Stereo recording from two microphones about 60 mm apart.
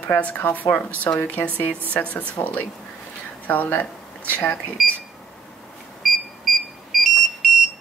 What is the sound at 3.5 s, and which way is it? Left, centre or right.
Speech, left.